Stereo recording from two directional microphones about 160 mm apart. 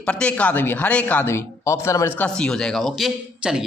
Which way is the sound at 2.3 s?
5° left (ahead or behind).